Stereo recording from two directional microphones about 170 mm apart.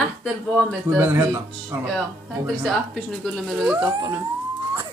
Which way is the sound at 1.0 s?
10° right (ahead or behind).